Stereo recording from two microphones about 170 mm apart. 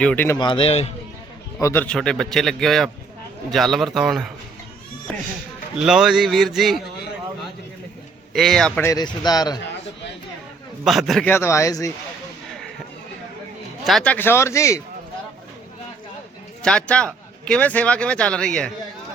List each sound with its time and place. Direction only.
0.0 s speech: 10° left (ahead or behind)
0.3 s speech: 30° left (ahead or behind)
1.6 s a man's voice: 10° left (ahead or behind)
5.7 s a man's voice: 5° right (ahead or behind)
8.3 s a man's voice: centre (ahead or behind)
8.9 s speech: 25° left (ahead or behind)
10.8 s a man's voice: centre (ahead or behind)
11.3 s speech: 15° left (ahead or behind)
13.8 s speech: 5° left (ahead or behind)
16.6 s a man's voice: 5° left (ahead or behind)